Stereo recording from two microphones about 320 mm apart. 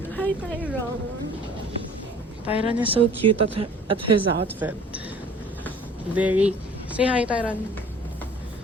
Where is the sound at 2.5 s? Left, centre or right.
Centre.